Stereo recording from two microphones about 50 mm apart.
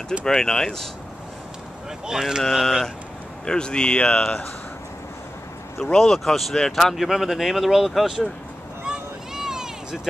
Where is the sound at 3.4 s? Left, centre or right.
Centre.